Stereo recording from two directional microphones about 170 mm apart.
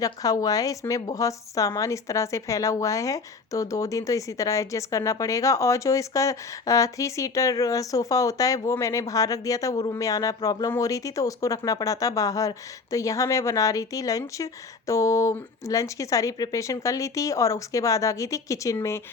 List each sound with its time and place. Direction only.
0.0 s a woman's voice: 20° left (ahead or behind)